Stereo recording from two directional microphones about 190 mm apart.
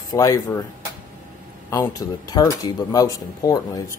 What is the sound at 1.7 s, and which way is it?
Speech, 20° left (ahead or behind).